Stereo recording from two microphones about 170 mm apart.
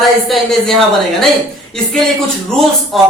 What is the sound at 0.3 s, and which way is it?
Speech, centre (ahead or behind).